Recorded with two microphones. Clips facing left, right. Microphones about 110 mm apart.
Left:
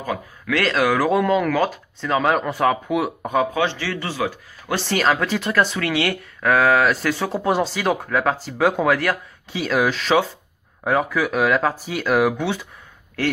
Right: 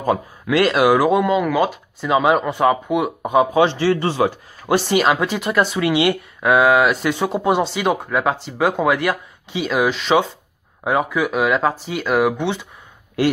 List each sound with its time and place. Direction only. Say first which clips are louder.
0.5 s speech: right 5 dB; 15° right (ahead or behind)
4.7 s speech: right 3 dB; 10° right (ahead or behind)